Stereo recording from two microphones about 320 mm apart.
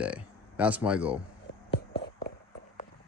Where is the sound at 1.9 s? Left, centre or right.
Left.